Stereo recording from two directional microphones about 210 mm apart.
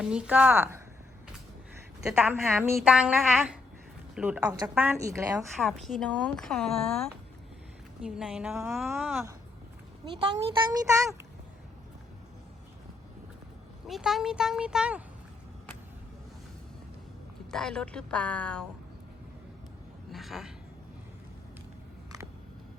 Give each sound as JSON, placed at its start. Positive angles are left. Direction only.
{"t": 0.0, "sound": "speech", "side_deg": -5}
{"t": 2.0, "sound": "a woman's voice", "side_deg": -5}
{"t": 5.5, "sound": "a woman's voice", "side_deg": 0}
{"t": 10.1, "sound": "speech", "side_deg": -25}
{"t": 13.8, "sound": "a woman's voice", "side_deg": 0}
{"t": 17.5, "sound": "a woman's voice", "side_deg": 5}
{"t": 20.1, "sound": "speech", "side_deg": 0}